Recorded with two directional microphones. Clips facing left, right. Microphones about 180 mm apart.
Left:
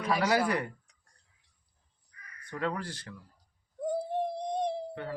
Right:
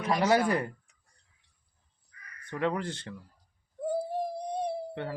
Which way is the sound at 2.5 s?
20° right (ahead or behind).